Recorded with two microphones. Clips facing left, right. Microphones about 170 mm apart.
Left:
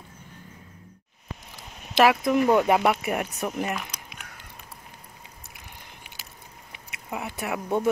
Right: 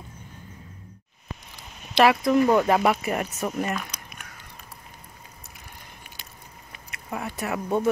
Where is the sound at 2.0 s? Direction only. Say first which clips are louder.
Right 1 dB; 5° left (ahead or behind).